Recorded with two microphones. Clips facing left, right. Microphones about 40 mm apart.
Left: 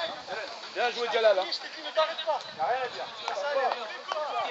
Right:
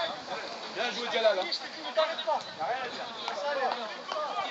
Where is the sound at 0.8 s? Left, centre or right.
Left.